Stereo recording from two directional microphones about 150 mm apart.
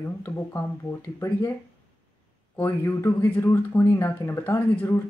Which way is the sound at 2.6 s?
15° left (ahead or behind).